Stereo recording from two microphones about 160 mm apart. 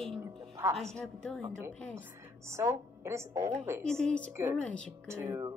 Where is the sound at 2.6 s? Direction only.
15° right (ahead or behind).